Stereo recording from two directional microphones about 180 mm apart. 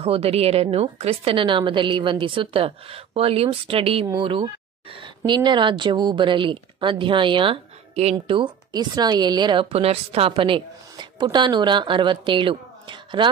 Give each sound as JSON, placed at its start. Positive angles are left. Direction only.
{"t": 0.0, "sound": "a woman's voice", "side_deg": -35}